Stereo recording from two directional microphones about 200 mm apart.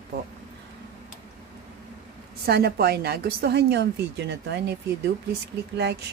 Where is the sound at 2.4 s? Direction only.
50° right (ahead or behind).